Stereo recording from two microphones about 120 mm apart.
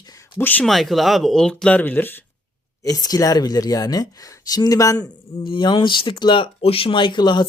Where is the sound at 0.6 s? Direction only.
Centre (ahead or behind); by 2.3 s 15° left (ahead or behind).